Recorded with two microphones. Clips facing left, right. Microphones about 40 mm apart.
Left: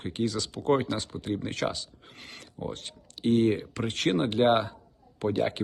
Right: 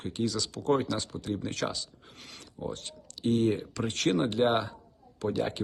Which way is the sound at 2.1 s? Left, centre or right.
Left.